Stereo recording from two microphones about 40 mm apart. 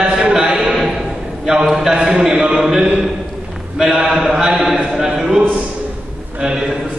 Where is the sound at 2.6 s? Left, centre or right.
Centre.